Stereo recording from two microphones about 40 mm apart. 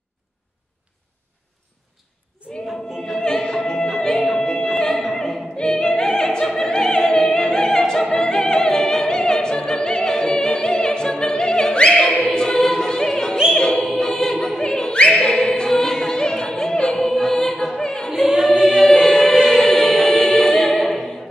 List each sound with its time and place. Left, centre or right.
2.4 s choir: right
3.2 s music: centre
5.1 s opera: centre
12.3 s music: centre
13.9 s choir: centre
14.6 s opera: centre
15.7 s music: centre
18.5 s music: right
18.8 s music: centre